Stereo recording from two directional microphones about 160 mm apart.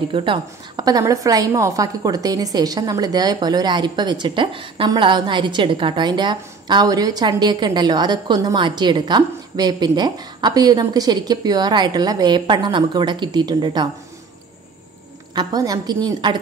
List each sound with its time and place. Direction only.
0.1 s a woman's voice: 30° right (ahead or behind)
15.3 s a woman's voice: 25° right (ahead or behind)